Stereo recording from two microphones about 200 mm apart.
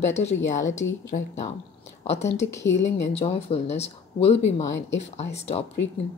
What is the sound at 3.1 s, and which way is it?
Speech, 30° left (ahead or behind).